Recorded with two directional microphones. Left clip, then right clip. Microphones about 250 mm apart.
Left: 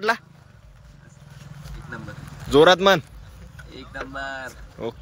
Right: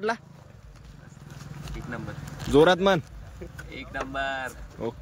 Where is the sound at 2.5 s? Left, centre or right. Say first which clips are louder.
Left 5 dB; centre.